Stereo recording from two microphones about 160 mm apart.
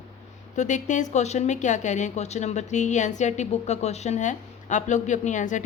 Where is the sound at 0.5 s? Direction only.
50° left (ahead or behind).